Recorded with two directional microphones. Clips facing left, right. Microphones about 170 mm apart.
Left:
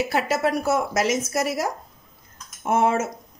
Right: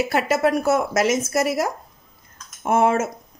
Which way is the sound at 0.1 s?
50° right (ahead or behind).